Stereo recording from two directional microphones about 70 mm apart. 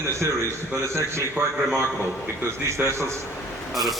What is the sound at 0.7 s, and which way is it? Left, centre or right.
Speech, right.